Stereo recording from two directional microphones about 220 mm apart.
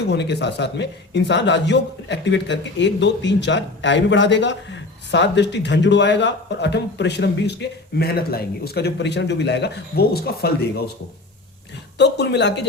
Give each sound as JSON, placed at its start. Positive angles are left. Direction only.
{"t": 0.0, "sound": "speech", "side_deg": 50}
{"t": 11.9, "sound": "speech", "side_deg": 50}